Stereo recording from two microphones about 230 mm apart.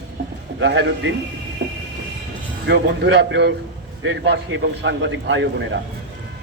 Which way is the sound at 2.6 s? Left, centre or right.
Right.